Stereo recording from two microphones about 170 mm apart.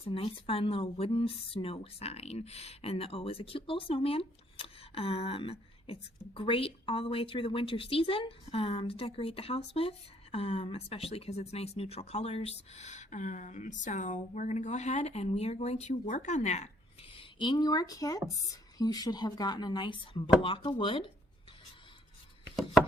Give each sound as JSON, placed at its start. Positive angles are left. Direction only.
{"t": 0.0, "sound": "speech", "side_deg": 35}